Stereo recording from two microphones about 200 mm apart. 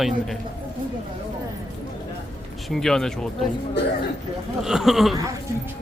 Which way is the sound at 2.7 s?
Centre (ahead or behind).